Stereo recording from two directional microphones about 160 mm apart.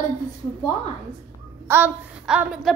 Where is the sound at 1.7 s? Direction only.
10° right (ahead or behind).